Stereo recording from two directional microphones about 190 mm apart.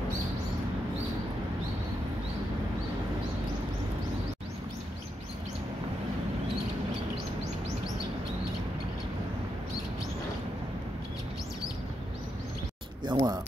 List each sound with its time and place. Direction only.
13.0 s speech: 25° right (ahead or behind)